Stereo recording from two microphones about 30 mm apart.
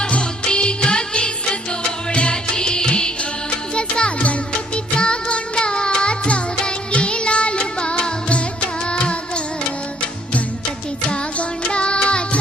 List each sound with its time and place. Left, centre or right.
0.1 s music: left
11.7 s music: left